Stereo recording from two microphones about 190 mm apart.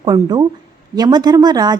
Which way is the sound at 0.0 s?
20° right (ahead or behind).